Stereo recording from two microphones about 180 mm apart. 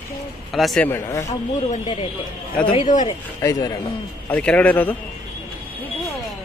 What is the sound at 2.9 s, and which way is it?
Speech, 20° left (ahead or behind).